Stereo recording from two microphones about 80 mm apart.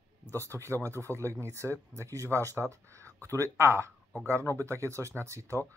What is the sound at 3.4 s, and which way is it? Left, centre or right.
Speech, right.